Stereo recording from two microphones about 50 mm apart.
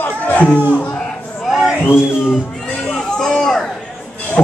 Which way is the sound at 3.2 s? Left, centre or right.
Centre.